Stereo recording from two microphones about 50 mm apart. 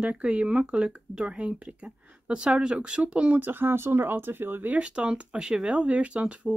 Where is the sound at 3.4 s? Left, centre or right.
Right.